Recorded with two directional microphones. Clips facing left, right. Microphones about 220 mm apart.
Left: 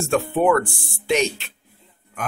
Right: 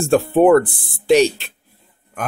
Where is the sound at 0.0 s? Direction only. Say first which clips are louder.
Right 6 dB; 35° right (ahead or behind).